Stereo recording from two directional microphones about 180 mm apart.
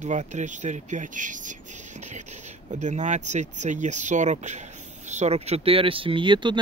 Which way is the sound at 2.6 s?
40° right (ahead or behind).